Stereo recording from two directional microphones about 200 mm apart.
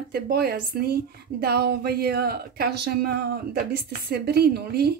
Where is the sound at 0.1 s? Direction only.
50° right (ahead or behind).